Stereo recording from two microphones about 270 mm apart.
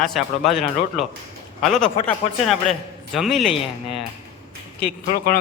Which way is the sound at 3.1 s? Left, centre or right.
Centre.